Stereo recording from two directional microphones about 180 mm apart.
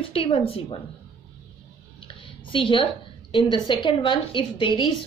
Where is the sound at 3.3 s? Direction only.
25° left (ahead or behind).